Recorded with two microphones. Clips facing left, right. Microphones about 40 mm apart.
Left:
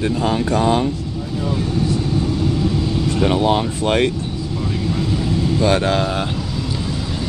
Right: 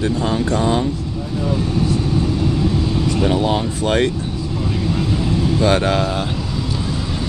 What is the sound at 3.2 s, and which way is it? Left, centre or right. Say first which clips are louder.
Speech: left 3 dB; centre.